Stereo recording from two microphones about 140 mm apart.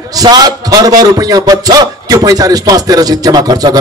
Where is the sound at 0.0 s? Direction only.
25° right (ahead or behind).